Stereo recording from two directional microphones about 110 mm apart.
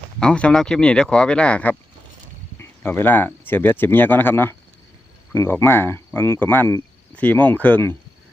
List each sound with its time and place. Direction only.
0.2 s speech: 10° left (ahead or behind)